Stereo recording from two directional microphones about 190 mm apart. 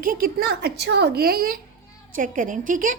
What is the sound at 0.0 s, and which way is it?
A woman's voice, 50° right (ahead or behind).